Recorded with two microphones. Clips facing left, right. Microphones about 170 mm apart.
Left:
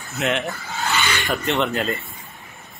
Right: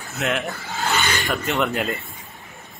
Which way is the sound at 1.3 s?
Centre (ahead or behind).